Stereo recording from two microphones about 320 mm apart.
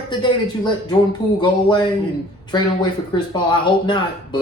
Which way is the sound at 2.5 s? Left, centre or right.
Centre.